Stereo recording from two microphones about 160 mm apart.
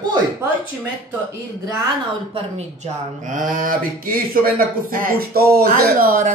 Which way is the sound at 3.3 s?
55° right (ahead or behind).